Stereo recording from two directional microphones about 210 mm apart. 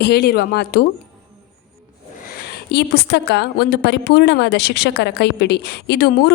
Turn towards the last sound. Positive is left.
turn(degrees=50)  # may be behind; listen again after turning